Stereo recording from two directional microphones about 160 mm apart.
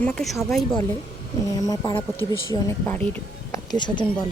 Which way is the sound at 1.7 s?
25° left (ahead or behind).